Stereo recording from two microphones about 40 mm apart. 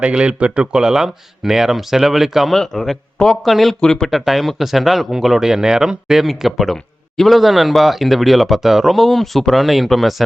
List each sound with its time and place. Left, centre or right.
0.1 s speech: right; by 2.5 s centre
2.5 s speech: centre
3.8 s speech: centre
4.1 s speech: centre